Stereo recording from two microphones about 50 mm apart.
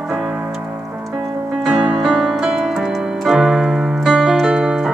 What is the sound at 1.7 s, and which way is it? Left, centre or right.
Music, centre.